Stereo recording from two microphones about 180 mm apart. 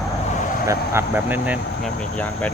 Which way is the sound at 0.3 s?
45° left (ahead or behind).